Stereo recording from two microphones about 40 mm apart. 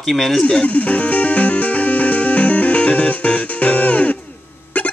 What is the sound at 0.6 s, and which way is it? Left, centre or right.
Music, left.